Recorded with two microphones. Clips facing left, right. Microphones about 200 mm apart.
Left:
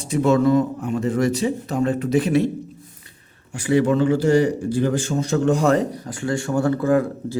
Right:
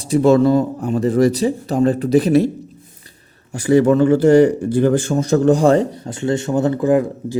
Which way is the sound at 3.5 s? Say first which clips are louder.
Right 5 dB; 40° right (ahead or behind).